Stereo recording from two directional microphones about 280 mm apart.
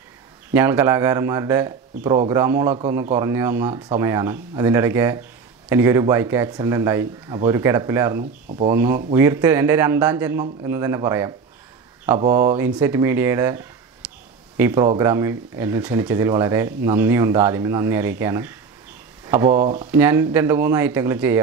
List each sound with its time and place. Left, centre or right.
0.5 s speech: centre
8.2 s speech: right
8.6 s speech: centre
19.6 s speech: right
19.9 s speech: centre